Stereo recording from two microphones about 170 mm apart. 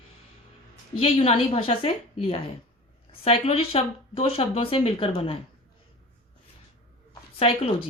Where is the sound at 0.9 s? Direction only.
35° left (ahead or behind).